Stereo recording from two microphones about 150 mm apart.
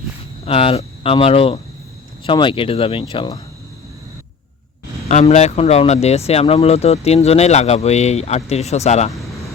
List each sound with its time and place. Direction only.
0.4 s speech: 40° left (ahead or behind)
5.0 s speech: 50° left (ahead or behind)